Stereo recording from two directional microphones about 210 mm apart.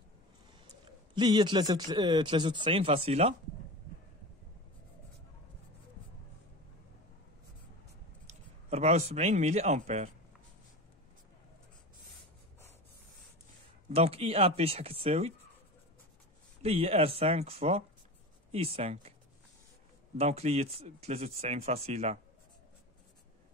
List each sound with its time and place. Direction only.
1.1 s speech: 20° right (ahead or behind)
8.3 s speech: 30° right (ahead or behind)
13.8 s speech: 30° right (ahead or behind)
16.6 s speech: 25° right (ahead or behind)
20.2 s speech: 30° right (ahead or behind)